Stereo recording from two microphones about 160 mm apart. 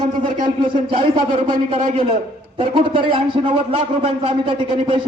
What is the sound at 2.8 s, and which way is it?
A man's voice, 35° right (ahead or behind).